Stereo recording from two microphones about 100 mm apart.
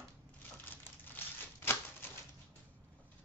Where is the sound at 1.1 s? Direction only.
20° left (ahead or behind).